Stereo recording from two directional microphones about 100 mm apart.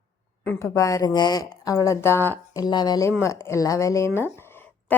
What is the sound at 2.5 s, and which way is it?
Speech, 45° left (ahead or behind).